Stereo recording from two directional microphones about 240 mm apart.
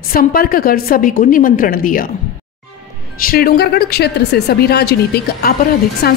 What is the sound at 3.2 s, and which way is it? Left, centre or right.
A woman's voice, left.